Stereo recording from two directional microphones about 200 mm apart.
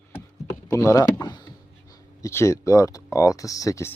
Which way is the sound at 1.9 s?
15° left (ahead or behind).